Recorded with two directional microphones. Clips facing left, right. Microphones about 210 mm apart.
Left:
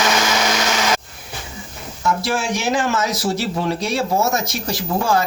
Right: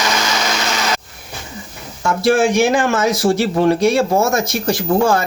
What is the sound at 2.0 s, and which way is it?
Speech, 55° right (ahead or behind).